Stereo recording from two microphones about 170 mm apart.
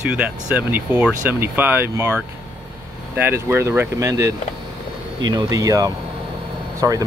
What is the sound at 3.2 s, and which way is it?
Speech, 15° right (ahead or behind).